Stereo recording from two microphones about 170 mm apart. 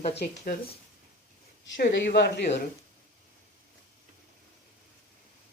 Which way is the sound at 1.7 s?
85° left.